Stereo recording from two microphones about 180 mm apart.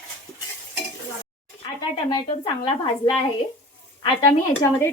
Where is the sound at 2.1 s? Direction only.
25° left (ahead or behind).